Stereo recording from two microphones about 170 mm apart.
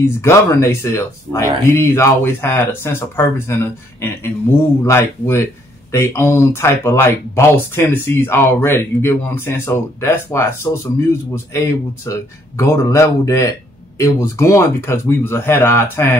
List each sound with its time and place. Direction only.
0.0 s speech: 15° left (ahead or behind)
4.8 s speech: 15° left (ahead or behind)